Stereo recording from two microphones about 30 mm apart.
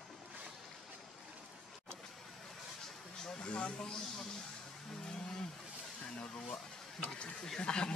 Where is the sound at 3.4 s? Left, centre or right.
Left.